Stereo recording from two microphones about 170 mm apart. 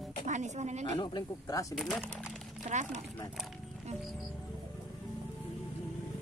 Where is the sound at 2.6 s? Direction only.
45° right (ahead or behind).